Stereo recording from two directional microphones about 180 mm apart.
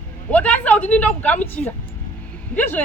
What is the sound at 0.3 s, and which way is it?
Speech, 10° left (ahead or behind).